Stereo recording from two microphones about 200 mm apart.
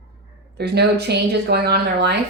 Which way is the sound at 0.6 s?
55° right (ahead or behind).